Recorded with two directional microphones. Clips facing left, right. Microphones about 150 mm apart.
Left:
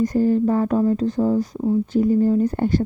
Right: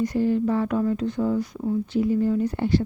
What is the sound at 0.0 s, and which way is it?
Speech, 45° left (ahead or behind).